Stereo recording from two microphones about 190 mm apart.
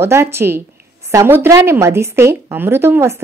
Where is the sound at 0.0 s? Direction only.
15° right (ahead or behind).